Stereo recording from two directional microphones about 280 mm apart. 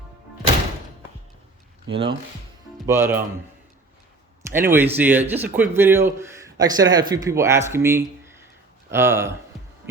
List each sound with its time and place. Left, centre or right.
1.9 s a man's voice: centre
4.5 s a man's voice: centre